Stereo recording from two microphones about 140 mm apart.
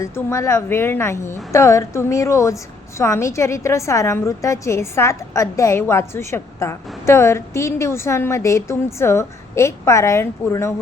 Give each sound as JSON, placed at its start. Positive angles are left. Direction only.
{"t": 0.0, "sound": "a woman's voice", "side_deg": 20}